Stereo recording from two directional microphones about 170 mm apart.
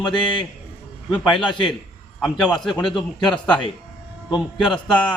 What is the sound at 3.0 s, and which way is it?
A man's voice, 25° left (ahead or behind).